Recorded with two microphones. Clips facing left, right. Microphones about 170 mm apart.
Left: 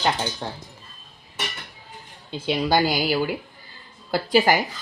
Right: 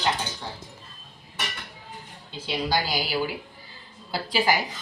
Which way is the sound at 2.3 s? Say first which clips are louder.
Left 6 dB; 55° left (ahead or behind).